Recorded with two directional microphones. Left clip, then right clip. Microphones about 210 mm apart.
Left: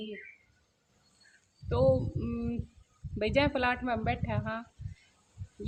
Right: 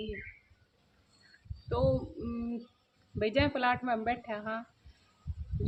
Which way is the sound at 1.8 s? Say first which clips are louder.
Left 4 dB; 20° left (ahead or behind).